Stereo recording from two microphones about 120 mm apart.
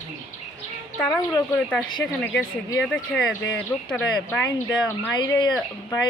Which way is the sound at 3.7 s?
15° left (ahead or behind).